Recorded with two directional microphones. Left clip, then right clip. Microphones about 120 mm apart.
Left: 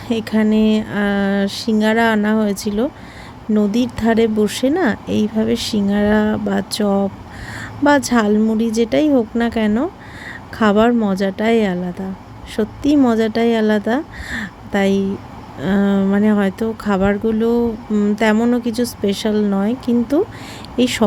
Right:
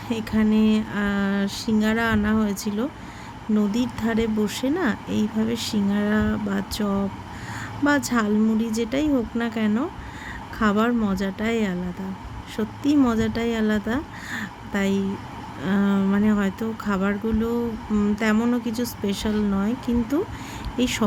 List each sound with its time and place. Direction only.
0.1 s a woman's voice: 45° left (ahead or behind)
17.9 s a sound: 30° left (ahead or behind)
18.5 s speech: 45° left (ahead or behind)